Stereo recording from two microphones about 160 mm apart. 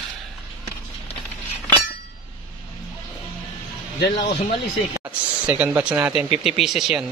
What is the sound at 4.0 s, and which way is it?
Speech, 90° left.